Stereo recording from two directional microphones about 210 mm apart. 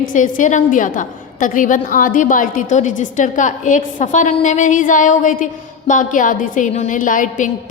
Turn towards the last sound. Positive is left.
turn(degrees=40)  # may be behind; listen again after turning